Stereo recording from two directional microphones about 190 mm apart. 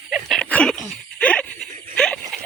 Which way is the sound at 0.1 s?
Centre (ahead or behind).